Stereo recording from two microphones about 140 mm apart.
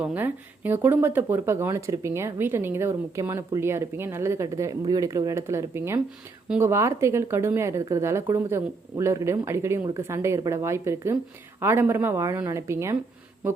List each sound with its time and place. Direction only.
0.0 s a woman's voice: 10° right (ahead or behind)